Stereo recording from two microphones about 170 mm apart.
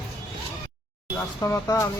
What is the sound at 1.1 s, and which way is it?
Speech, 15° left (ahead or behind).